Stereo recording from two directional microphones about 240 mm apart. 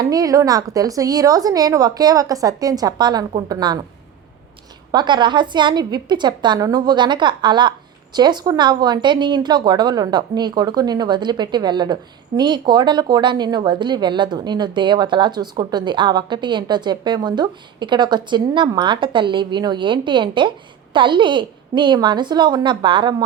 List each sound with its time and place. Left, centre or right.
0.0 s a woman's voice: centre
4.9 s a woman's voice: centre